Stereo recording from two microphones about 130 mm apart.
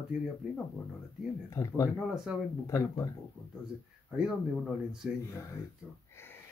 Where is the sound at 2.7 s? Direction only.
25° left (ahead or behind).